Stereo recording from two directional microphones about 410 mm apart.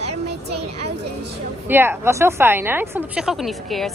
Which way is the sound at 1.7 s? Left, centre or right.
Centre.